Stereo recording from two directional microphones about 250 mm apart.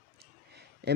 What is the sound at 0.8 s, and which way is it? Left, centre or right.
Speech, right.